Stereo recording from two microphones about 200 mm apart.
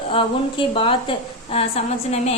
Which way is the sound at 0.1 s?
25° left (ahead or behind).